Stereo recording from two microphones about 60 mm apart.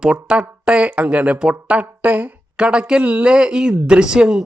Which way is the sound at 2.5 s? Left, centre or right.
Centre.